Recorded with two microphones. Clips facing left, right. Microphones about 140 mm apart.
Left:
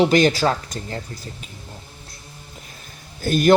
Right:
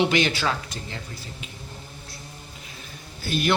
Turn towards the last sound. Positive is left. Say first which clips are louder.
# left 9 dB
turn(degrees=45)  # may be behind; listen again after turning